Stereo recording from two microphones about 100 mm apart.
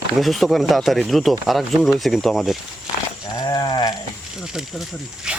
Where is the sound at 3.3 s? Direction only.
40° left (ahead or behind).